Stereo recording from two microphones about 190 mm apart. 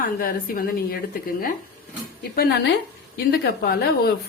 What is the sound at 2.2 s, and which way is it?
A woman's voice, 55° left (ahead or behind).